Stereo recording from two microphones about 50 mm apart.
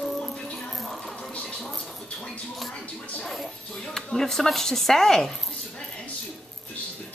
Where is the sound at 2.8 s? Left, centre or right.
Left.